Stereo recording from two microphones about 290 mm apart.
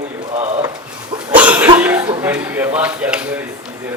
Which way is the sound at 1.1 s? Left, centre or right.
Centre.